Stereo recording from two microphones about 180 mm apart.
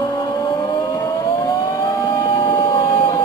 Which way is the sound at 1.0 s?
15° left (ahead or behind).